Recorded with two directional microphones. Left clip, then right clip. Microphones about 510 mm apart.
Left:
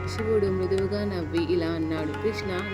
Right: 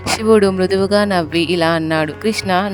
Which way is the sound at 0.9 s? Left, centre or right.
Centre.